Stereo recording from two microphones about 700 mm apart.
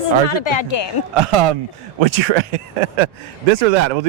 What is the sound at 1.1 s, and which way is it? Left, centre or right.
Speech, right.